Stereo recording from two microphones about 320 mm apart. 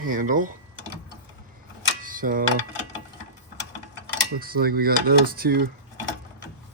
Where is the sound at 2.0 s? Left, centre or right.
Right.